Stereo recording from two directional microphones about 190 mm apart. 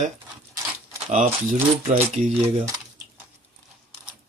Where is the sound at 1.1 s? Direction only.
40° right (ahead or behind).